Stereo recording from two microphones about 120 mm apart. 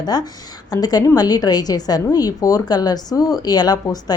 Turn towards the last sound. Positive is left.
turn(degrees=35)  # may be behind; listen again after turning